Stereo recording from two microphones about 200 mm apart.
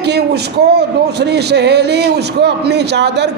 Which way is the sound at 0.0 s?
55° right (ahead or behind).